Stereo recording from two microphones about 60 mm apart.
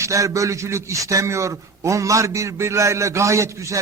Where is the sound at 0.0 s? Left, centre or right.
Right.